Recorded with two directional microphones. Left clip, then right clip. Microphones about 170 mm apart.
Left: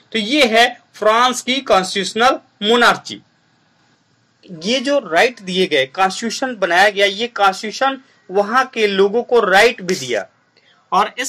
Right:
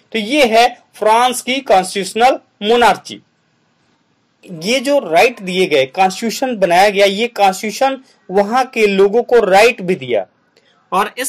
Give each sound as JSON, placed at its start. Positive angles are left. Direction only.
{"t": 0.1, "sound": "speech", "side_deg": -20}
{"t": 4.4, "sound": "speech", "side_deg": -20}